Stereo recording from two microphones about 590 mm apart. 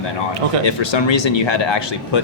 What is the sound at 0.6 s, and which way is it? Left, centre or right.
Speech, left.